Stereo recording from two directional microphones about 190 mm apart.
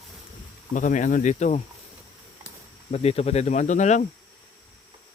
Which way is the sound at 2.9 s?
35° left (ahead or behind).